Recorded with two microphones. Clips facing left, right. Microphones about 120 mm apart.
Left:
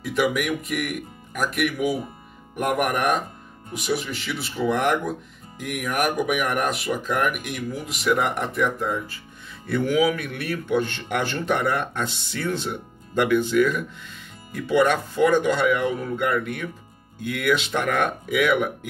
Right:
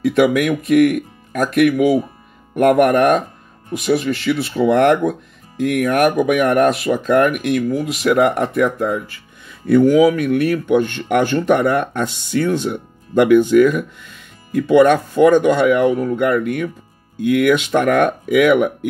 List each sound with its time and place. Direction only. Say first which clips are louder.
0.0 s speech: right 9 dB; 65° right (ahead or behind)